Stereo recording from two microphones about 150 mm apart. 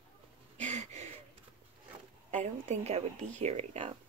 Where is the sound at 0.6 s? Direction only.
50° right (ahead or behind).